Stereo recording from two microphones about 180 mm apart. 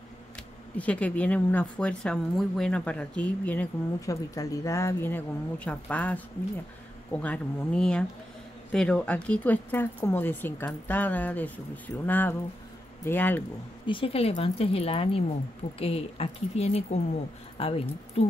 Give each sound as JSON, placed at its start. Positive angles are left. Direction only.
{"t": 0.7, "sound": "speech", "side_deg": 5}
{"t": 13.8, "sound": "speech", "side_deg": 30}